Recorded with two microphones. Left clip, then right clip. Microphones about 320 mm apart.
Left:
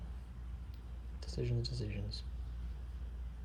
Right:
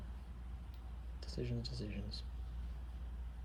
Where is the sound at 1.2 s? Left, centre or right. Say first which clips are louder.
Left 3 dB; centre.